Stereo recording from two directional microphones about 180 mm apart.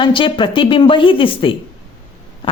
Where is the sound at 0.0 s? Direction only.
30° left (ahead or behind).